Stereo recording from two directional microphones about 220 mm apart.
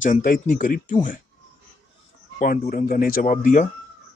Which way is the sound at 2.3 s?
40° left (ahead or behind).